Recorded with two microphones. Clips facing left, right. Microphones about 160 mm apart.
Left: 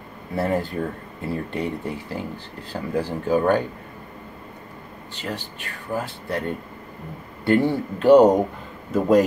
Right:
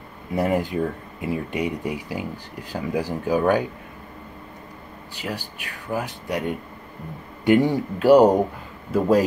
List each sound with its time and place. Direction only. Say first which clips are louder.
0.4 s speech: right 1 dB; 15° right (ahead or behind)
5.1 s speech: even; 10° right (ahead or behind)